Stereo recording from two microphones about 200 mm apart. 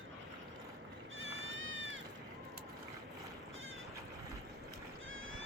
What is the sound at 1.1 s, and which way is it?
Goat, 75° right (ahead or behind).